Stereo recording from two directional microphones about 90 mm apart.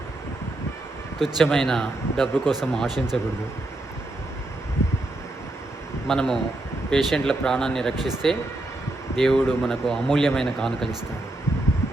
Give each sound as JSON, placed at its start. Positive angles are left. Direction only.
{"t": 1.2, "sound": "speech", "side_deg": 0}
{"t": 4.8, "sound": "a sound", "side_deg": 30}
{"t": 6.1, "sound": "speech", "side_deg": 5}